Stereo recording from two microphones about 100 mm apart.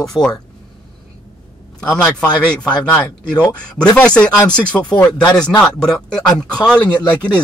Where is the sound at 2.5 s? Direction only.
10° left (ahead or behind).